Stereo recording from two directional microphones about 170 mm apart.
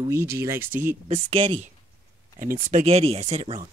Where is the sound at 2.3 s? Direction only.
55° right (ahead or behind).